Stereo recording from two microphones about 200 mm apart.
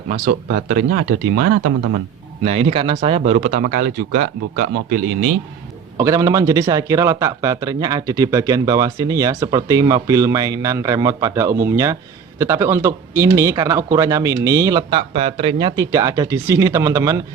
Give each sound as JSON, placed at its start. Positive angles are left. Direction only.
{"t": 0.1, "sound": "speech", "side_deg": -50}
{"t": 2.4, "sound": "speech", "side_deg": -30}
{"t": 6.0, "sound": "speech", "side_deg": -15}